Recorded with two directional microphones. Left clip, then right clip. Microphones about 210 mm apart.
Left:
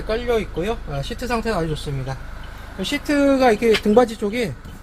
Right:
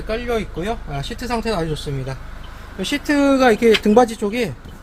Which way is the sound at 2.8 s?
15° right (ahead or behind).